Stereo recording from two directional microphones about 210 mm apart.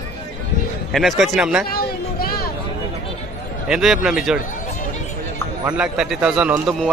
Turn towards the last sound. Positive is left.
turn(degrees=-5)  # may be behind; listen again after turning